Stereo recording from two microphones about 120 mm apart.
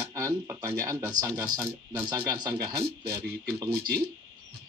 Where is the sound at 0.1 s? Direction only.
25° right (ahead or behind).